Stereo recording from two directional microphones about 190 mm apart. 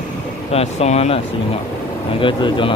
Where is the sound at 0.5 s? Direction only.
35° left (ahead or behind).